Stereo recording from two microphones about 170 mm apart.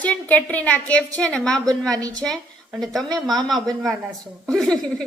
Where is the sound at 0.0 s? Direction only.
10° left (ahead or behind).